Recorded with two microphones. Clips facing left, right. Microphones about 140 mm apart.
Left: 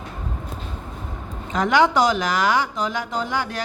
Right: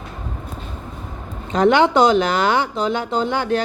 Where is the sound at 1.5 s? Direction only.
30° right (ahead or behind).